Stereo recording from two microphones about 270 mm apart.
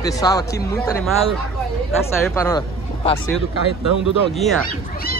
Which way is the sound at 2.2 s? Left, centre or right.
Centre.